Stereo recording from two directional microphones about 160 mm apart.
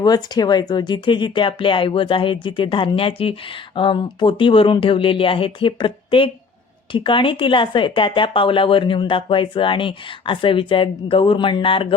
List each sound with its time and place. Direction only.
0.0 s speech: 25° left (ahead or behind)